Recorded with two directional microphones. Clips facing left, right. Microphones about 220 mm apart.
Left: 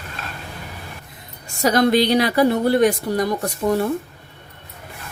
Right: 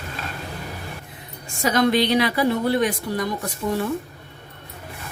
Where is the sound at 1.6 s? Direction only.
40° left (ahead or behind).